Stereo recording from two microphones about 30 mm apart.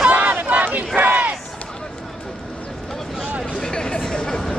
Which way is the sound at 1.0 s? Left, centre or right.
Right.